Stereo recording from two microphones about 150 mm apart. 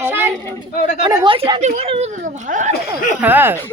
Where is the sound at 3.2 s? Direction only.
15° right (ahead or behind).